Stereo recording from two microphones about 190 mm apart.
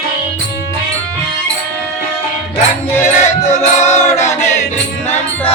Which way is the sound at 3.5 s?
35° left (ahead or behind).